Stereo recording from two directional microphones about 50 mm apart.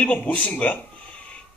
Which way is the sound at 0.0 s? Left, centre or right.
Left.